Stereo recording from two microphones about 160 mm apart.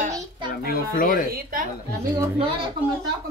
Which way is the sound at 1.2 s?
70° right (ahead or behind).